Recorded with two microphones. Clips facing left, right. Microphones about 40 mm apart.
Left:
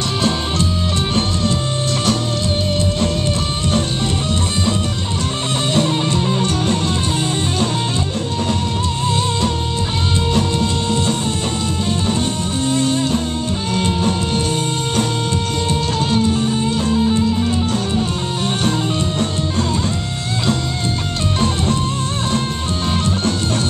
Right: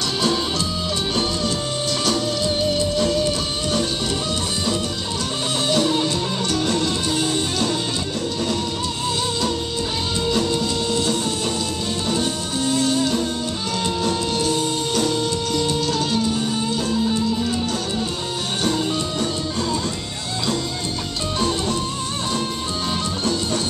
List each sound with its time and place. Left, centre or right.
5.7 s music: left
10.3 s music: left
15.7 s music: left
18.6 s music: left